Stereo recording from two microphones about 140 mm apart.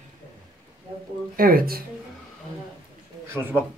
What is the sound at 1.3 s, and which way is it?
Speech, 90° right.